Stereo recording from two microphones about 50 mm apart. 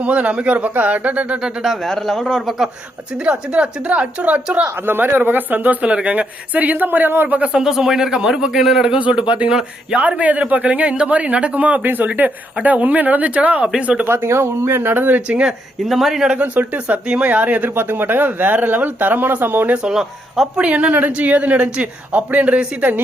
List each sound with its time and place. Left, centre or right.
0.0 s a man's voice: right
1.4 s a man's voice: centre
1.8 s a man's voice: centre
3.1 s a man's voice: right
4.8 s speech: right
7.3 s a man's voice: right
7.6 s a man's voice: centre
9.0 s a man's voice: right
14.1 s speech: right
15.4 s speech: centre
16.4 s a man's voice: right
17.7 s speech: right
19.7 s a man's voice: centre
20.6 s a man's voice: right